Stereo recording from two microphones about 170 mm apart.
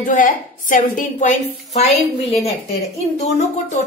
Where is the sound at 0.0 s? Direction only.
50° left (ahead or behind).